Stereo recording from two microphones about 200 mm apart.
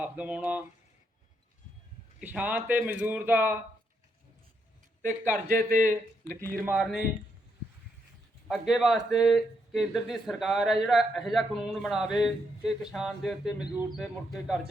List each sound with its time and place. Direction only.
0.0 s speech: 5° right (ahead or behind)
2.2 s a man's voice: 5° right (ahead or behind)
5.2 s a man's voice: 40° right (ahead or behind)
6.6 s speech: 5° right (ahead or behind)
8.4 s speech: centre (ahead or behind)